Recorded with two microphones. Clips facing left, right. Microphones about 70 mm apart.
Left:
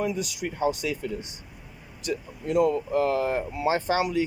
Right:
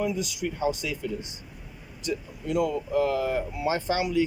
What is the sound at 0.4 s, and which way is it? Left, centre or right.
Speech, left.